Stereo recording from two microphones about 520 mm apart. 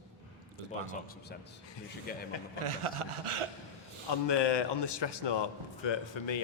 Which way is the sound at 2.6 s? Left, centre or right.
Right.